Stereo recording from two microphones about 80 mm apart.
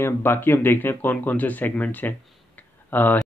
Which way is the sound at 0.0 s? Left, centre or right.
Left.